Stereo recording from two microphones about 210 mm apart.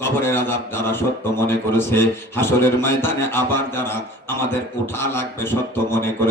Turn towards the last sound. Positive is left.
turn(degrees=10)  # may be behind; listen again after turning